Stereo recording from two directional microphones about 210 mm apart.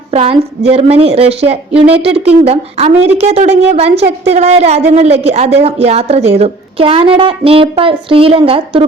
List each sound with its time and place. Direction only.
0.1 s a woman's voice: 30° right (ahead or behind)